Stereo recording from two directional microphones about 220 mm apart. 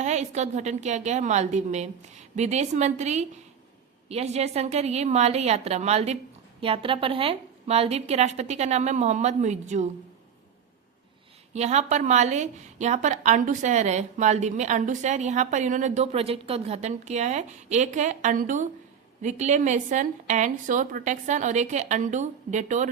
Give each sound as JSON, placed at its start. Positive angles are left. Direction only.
{"t": 0.0, "sound": "a woman's voice", "side_deg": -30}
{"t": 11.5, "sound": "a woman's voice", "side_deg": -30}